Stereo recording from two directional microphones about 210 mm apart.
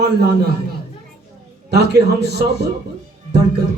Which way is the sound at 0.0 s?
50° right (ahead or behind).